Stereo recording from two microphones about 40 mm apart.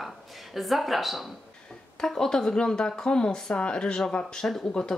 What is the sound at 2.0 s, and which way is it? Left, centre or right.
Speech, centre.